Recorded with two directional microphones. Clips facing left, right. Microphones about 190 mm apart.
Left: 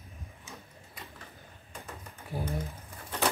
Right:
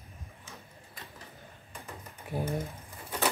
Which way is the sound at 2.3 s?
20° right (ahead or behind).